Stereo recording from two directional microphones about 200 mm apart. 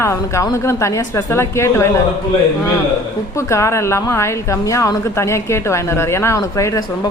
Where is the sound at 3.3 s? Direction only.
15° left (ahead or behind).